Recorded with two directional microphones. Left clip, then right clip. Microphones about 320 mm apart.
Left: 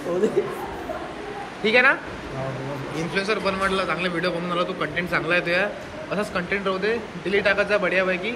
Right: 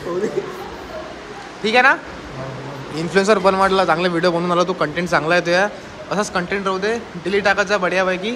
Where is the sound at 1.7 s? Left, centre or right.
Centre.